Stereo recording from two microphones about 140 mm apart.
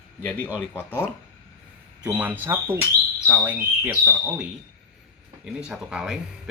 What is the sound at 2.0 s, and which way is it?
Speech, 10° right (ahead or behind).